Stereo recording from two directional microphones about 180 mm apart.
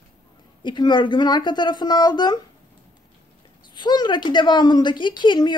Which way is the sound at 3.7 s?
25° left (ahead or behind).